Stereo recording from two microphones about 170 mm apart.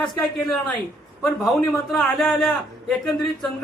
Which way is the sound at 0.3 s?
Centre (ahead or behind).